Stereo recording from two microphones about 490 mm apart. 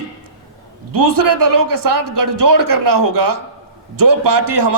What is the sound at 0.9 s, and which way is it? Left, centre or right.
A man's voice, right.